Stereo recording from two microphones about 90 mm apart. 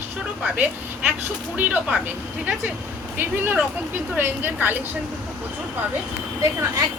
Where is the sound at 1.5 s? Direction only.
20° right (ahead or behind).